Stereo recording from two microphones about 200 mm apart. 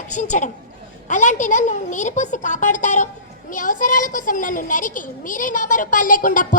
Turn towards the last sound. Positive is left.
turn(degrees=40)  # may be behind; listen again after turning